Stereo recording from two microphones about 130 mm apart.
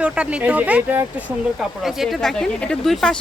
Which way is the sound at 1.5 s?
Centre (ahead or behind).